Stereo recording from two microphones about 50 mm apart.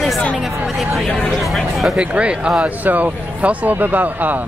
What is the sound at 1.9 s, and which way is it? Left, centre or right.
Speech, right.